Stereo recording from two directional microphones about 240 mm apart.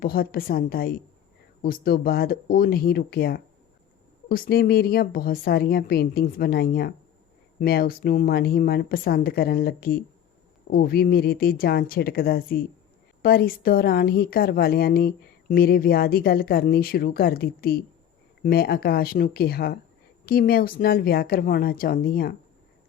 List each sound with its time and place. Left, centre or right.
0.0 s a woman's voice: left